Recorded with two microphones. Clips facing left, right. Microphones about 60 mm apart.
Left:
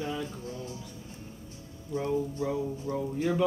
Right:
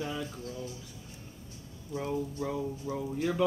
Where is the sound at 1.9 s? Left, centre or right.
Centre.